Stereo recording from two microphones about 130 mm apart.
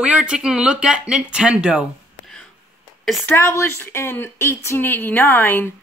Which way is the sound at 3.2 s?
15° left (ahead or behind).